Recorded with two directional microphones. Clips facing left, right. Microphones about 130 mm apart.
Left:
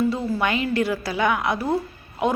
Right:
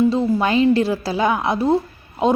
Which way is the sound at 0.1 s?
30° right (ahead or behind).